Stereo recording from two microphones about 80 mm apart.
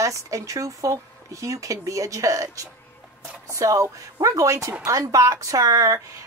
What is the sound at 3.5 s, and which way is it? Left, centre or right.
A woman's voice, right.